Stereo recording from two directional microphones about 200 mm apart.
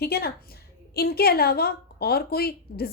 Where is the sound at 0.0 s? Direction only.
50° left (ahead or behind).